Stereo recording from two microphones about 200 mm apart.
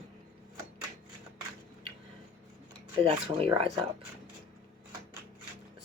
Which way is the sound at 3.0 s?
25° right (ahead or behind).